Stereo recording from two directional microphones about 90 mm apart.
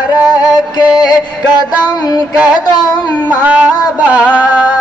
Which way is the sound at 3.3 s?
15° right (ahead or behind).